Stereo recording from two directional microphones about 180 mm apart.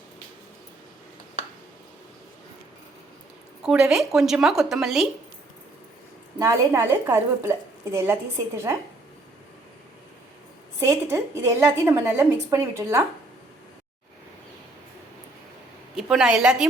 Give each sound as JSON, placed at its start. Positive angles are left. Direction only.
{"t": 3.6, "sound": "a woman's voice", "side_deg": -5}
{"t": 6.4, "sound": "a woman's voice", "side_deg": -15}
{"t": 10.8, "sound": "a woman's voice", "side_deg": -15}
{"t": 16.0, "sound": "a woman's voice", "side_deg": -5}